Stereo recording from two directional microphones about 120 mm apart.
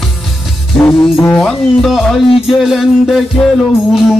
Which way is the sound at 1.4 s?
5° left (ahead or behind).